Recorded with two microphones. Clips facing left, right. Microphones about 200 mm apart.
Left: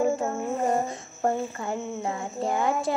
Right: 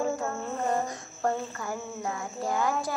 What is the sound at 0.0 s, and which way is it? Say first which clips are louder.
Music: left 5 dB; 15° left (ahead or behind).